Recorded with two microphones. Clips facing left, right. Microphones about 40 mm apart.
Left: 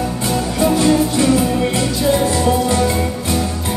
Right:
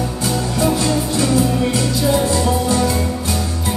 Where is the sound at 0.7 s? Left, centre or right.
Left.